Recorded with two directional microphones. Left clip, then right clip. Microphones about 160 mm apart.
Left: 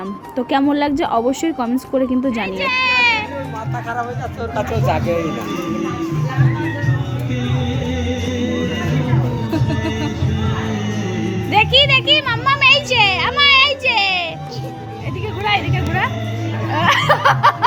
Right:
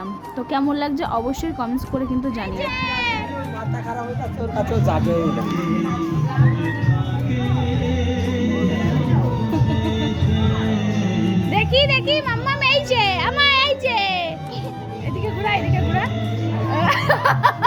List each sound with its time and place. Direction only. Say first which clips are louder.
0.3 s speech: left 5 dB; 25° left (ahead or behind)
2.6 s children playing: left 9 dB; centre (ahead or behind)
4.5 s speech: left 2 dB; 60° right (ahead or behind)
9.5 s music: left 2 dB; centre (ahead or behind)
11.5 s a sound: left 6 dB; 5° right (ahead or behind)
12.9 s music: left 4 dB; 25° right (ahead or behind)
15.4 s a sound: left 4 dB; 5° right (ahead or behind)